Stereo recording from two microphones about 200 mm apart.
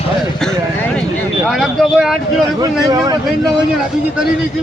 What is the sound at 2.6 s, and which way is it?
Speech, 20° right (ahead or behind).